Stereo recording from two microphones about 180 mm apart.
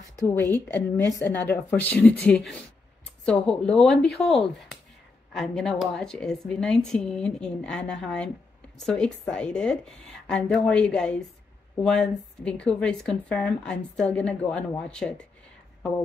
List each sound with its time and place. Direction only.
0.2 s a woman's voice: 15° left (ahead or behind)